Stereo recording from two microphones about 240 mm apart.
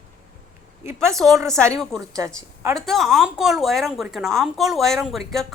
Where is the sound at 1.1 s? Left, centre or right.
Centre.